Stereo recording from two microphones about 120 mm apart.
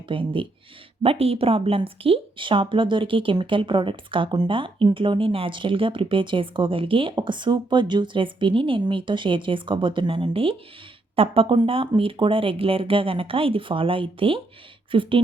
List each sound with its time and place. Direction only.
0.1 s speech: 45° right (ahead or behind)
1.0 s speech: 55° right (ahead or behind)